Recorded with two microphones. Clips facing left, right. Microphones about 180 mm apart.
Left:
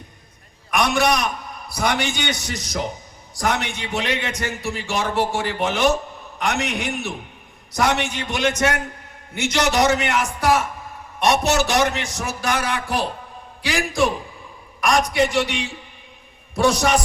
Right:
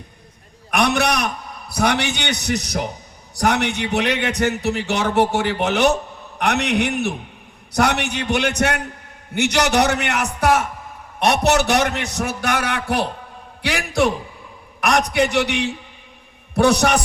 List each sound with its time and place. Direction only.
0.7 s a man's voice: 70° right (ahead or behind)